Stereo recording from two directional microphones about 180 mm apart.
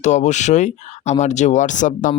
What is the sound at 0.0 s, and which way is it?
Speech, 40° left (ahead or behind).